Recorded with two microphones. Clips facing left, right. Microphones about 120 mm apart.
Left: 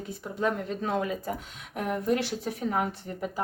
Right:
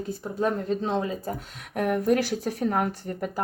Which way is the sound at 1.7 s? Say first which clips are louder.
Right 5 dB; 55° right (ahead or behind).